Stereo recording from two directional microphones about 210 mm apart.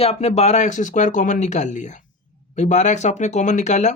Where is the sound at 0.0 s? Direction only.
30° left (ahead or behind).